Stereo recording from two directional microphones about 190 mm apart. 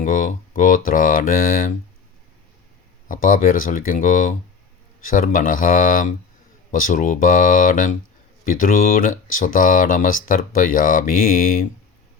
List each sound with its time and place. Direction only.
0.0 s speech: 45° left (ahead or behind)
3.1 s speech: 45° left (ahead or behind)